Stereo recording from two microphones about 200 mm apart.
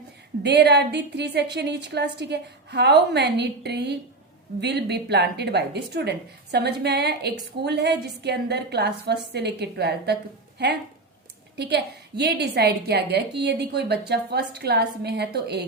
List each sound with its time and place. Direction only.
0.4 s a woman's voice: 60° right (ahead or behind)
11.6 s a woman's voice: 55° right (ahead or behind)